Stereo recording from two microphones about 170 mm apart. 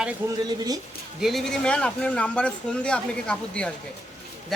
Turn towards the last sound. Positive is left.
turn(degrees=5)  # may be behind; listen again after turning